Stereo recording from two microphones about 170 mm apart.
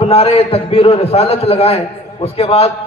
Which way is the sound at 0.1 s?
35° left (ahead or behind).